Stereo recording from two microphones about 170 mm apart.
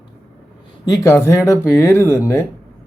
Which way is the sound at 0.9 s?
15° left (ahead or behind).